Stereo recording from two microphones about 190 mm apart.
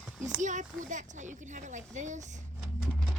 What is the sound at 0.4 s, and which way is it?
Speech, 40° right (ahead or behind).